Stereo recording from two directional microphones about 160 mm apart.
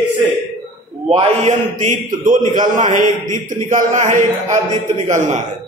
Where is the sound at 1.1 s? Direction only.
50° right (ahead or behind).